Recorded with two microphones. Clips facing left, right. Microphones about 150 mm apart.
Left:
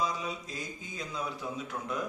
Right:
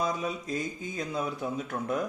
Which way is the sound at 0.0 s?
50° right (ahead or behind).